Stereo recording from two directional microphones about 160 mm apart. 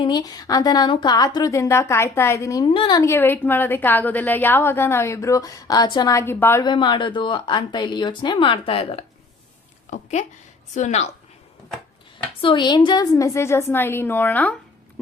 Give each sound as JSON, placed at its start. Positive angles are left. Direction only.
{"t": 0.0, "sound": "a woman's voice", "side_deg": 25}
{"t": 2.6, "sound": "a woman's voice", "side_deg": 30}
{"t": 3.0, "sound": "a woman's voice", "side_deg": 15}
{"t": 6.7, "sound": "a woman's voice", "side_deg": 30}
{"t": 12.4, "sound": "a woman's voice", "side_deg": 30}